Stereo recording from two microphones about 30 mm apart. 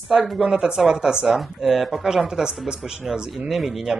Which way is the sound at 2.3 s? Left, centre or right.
Right.